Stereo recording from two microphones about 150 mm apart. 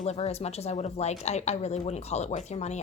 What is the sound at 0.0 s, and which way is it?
A woman's voice, 45° left (ahead or behind).